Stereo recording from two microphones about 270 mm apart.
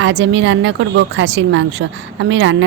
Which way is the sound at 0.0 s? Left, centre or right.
Right.